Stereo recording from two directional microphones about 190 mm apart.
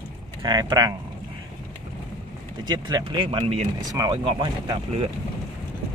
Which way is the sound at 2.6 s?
20° right (ahead or behind).